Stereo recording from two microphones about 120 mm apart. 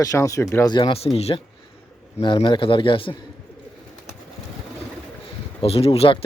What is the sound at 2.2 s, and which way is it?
Speech, 40° left (ahead or behind).